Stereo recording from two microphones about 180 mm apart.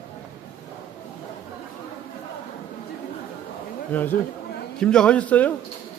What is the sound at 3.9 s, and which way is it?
A man's voice, 10° left (ahead or behind).